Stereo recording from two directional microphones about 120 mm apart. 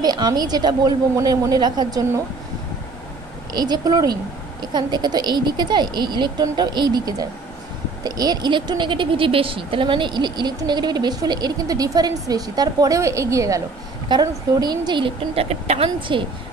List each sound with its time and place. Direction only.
0.0 s speech: 35° right (ahead or behind)
3.5 s speech: 35° right (ahead or behind)
15.4 s speech: 65° right (ahead or behind)
16.1 s a woman's voice: 45° right (ahead or behind)